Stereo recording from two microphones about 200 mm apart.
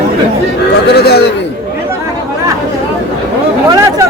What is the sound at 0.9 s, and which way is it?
Speech, 55° left (ahead or behind).